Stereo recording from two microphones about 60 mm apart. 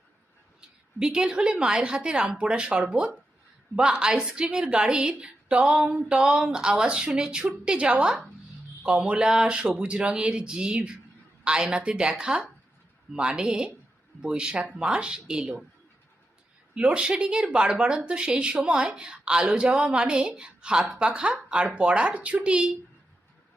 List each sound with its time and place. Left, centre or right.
0.9 s speech: centre
13.1 s speech: centre
16.7 s speech: centre